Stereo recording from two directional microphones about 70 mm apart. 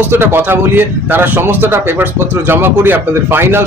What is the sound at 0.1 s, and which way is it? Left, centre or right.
Speech, right.